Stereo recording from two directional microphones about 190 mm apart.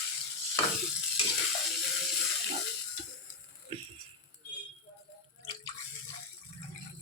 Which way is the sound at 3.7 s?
30° right (ahead or behind).